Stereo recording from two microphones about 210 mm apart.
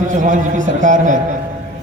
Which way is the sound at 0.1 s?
35° right (ahead or behind).